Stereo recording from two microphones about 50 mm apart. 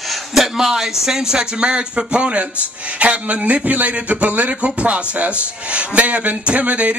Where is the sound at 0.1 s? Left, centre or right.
Centre.